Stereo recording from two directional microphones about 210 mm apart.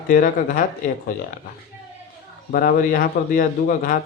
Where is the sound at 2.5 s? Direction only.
45° left (ahead or behind).